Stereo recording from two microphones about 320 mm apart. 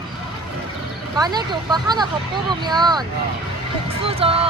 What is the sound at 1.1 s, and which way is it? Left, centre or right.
Speech, centre.